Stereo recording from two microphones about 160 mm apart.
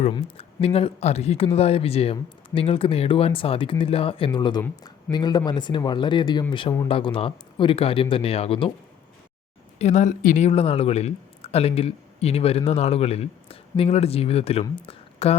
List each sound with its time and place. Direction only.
0.1 s speech: 35° left (ahead or behind)
9.7 s speech: 45° left (ahead or behind)